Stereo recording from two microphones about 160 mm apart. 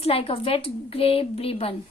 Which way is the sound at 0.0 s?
35° left (ahead or behind).